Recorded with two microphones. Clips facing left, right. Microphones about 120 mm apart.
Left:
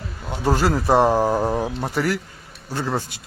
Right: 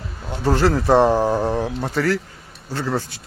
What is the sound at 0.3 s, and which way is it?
Speech, 10° left (ahead or behind).